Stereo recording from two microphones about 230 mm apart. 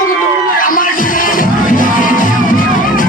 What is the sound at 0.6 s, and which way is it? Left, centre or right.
Music, left.